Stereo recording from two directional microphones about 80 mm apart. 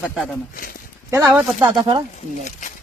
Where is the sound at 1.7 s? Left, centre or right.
Right.